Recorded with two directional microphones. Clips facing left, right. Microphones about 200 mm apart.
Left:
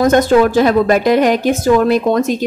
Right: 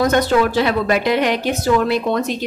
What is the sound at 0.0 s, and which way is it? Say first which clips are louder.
A woman's voice: left 5 dB; 45° left (ahead or behind).